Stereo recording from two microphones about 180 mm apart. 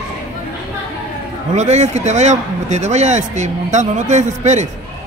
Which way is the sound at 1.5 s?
40° right (ahead or behind).